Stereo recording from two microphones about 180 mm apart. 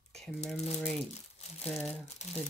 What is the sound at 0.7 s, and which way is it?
Speech, centre (ahead or behind).